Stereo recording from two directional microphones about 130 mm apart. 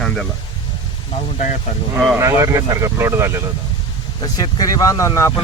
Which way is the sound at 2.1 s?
20° right (ahead or behind).